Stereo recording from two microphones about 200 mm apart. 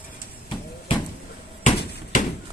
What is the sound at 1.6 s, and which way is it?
Bouncing, 40° left (ahead or behind).